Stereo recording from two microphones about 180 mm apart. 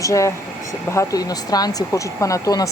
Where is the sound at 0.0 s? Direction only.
15° left (ahead or behind).